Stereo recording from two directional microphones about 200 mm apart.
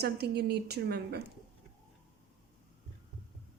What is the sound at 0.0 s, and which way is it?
A woman's voice, 55° right (ahead or behind).